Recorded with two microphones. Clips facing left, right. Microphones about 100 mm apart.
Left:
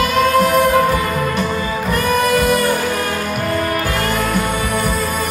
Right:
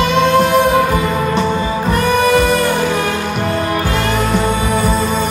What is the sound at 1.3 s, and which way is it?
Music, 30° right (ahead or behind).